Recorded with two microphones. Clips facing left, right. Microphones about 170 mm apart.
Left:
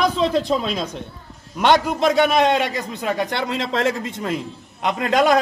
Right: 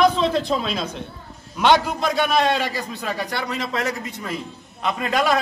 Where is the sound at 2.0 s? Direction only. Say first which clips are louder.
Left 4 dB; 20° left (ahead or behind).